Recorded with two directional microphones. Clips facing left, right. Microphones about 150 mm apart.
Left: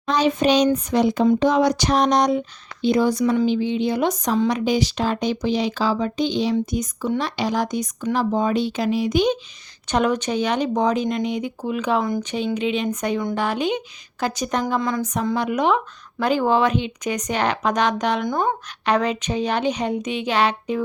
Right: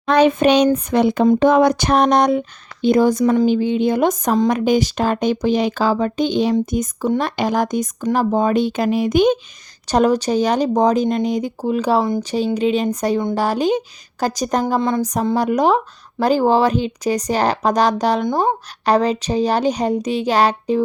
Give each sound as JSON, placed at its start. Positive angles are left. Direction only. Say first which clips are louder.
{"t": 0.0, "sound": "speech", "louder": "right 5 dB", "side_deg": -60}
{"t": 9.8, "sound": "speech", "louder": "right 5 dB", "side_deg": -35}
{"t": 14.8, "sound": "speech", "louder": "right 4 dB", "side_deg": -30}